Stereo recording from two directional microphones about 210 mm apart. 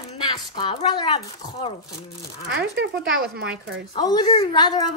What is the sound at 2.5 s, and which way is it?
Speech, 55° right (ahead or behind).